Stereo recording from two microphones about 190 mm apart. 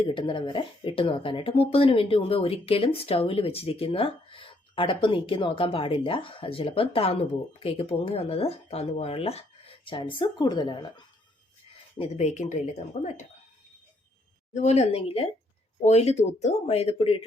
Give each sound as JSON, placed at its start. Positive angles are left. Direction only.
{"t": 0.0, "sound": "speech", "side_deg": 25}
{"t": 11.9, "sound": "speech", "side_deg": 35}
{"t": 14.5, "sound": "speech", "side_deg": 35}